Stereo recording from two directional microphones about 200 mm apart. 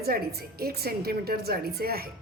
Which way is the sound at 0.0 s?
50° right (ahead or behind).